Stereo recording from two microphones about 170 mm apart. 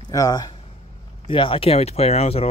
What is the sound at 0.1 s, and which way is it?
Speech, 20° left (ahead or behind).